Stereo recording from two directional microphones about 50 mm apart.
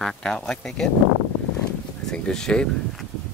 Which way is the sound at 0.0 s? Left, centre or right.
Centre.